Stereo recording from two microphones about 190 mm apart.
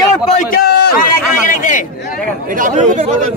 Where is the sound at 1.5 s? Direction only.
40° left (ahead or behind).